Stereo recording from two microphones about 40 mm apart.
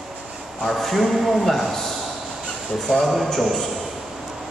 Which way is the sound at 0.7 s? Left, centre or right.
Centre.